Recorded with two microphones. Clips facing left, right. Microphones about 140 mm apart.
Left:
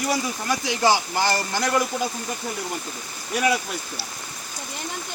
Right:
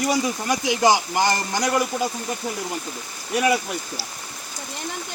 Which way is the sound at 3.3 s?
10° right (ahead or behind).